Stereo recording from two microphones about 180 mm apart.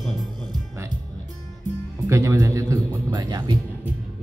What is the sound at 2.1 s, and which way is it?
Speech, 15° right (ahead or behind).